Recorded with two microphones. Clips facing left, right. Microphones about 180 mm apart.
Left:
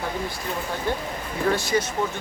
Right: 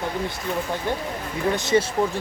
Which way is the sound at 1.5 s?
25° right (ahead or behind).